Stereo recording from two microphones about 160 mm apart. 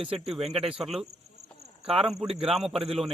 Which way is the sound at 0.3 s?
40° right (ahead or behind).